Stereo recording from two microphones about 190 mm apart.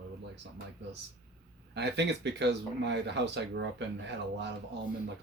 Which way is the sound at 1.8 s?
65° right (ahead or behind).